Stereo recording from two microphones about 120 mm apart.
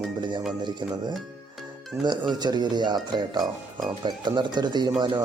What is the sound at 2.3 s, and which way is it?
Speech, 35° right (ahead or behind).